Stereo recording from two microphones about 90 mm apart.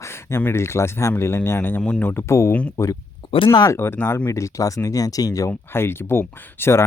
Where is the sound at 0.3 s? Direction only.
30° left (ahead or behind).